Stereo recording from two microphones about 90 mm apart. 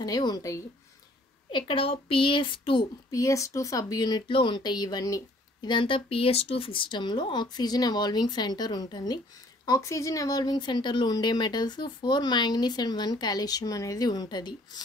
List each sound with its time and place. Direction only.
0.0 s a woman's voice: 45° left (ahead or behind)
1.5 s a woman's voice: 75° left (ahead or behind)
3.1 s speech: 35° left (ahead or behind)
4.3 s speech: 70° left (ahead or behind); by 5.7 s 45° left (ahead or behind)
5.7 s speech: 70° left (ahead or behind); by 9.2 s 50° left (ahead or behind)
9.7 s a woman's voice: 35° left (ahead or behind)